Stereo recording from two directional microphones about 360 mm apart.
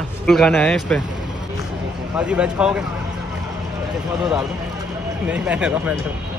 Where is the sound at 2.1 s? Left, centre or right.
Centre.